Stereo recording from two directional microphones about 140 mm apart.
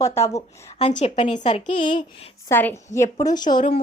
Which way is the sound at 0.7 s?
50° left (ahead or behind).